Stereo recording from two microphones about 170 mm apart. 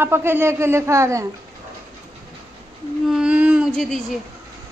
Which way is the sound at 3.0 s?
5° right (ahead or behind).